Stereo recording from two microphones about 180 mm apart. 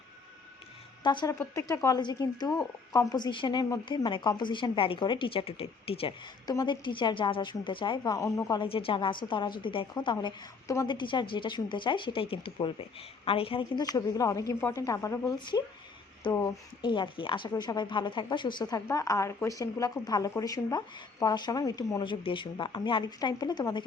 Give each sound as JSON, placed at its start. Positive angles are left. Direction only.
{"t": 1.0, "sound": "speech", "side_deg": 25}